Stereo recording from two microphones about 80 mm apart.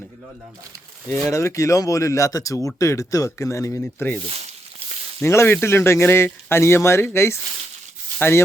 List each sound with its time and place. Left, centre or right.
1.1 s speech: left
5.2 s speech: left